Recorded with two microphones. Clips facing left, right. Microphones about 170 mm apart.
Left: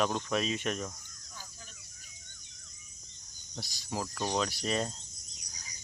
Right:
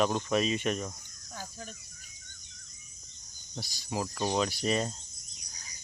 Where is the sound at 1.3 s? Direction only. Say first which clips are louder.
Right 9 dB; 55° right (ahead or behind).